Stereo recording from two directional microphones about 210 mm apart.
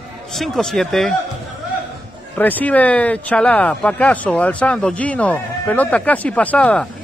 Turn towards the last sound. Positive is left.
turn(degrees=5)  # may be behind; listen again after turning